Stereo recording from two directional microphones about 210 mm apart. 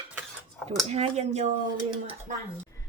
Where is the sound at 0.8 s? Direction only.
30° right (ahead or behind).